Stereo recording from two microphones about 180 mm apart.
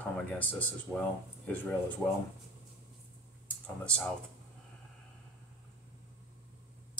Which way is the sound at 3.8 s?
5° left (ahead or behind).